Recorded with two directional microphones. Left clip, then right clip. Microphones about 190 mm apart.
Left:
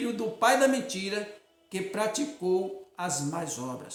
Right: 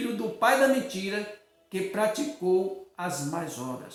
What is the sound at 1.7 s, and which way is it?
Speech, 15° left (ahead or behind).